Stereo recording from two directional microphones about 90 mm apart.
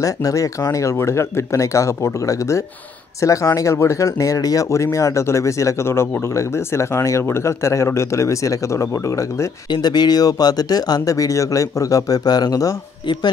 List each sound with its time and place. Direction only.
0.0 s speech: 40° left (ahead or behind)
9.7 s speech: 50° left (ahead or behind)